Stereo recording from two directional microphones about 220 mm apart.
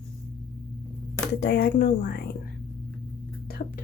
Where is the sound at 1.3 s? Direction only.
50° left (ahead or behind).